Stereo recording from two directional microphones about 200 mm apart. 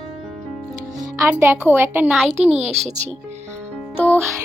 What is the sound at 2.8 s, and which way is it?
Speech, 35° right (ahead or behind).